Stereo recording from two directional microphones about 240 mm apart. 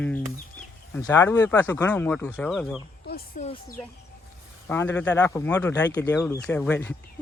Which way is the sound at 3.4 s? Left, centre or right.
Left.